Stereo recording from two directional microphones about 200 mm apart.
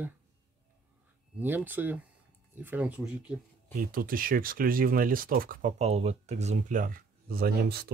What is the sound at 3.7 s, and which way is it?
Speech, 45° right (ahead or behind).